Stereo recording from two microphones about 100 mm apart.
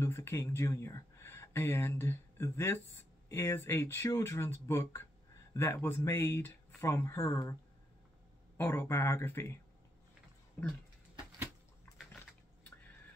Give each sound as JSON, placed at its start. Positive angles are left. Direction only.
{"t": 0.0, "sound": "speech", "side_deg": 25}
{"t": 8.5, "sound": "speech", "side_deg": 25}